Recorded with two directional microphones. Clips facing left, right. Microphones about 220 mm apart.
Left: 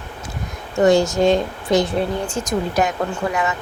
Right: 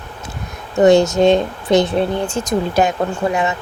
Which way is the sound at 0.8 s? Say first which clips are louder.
Right 4 dB; 20° right (ahead or behind).